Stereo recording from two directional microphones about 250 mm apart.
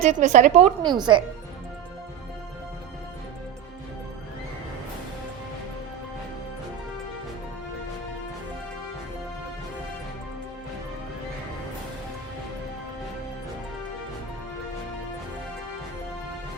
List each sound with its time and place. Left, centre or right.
0.1 s a woman's voice: right
0.8 s speech: centre